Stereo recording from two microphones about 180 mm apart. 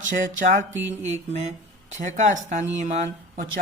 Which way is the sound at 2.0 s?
45° right (ahead or behind).